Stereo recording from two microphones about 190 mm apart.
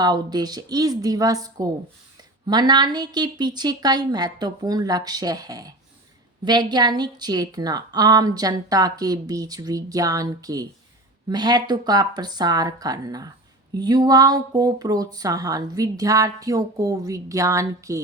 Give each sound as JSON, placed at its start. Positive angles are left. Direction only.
{"t": 0.0, "sound": "a woman's voice", "side_deg": -20}